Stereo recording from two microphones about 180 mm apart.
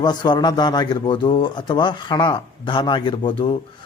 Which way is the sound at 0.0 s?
25° left (ahead or behind).